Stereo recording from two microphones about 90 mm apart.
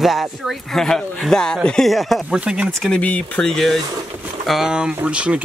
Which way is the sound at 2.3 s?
10° right (ahead or behind).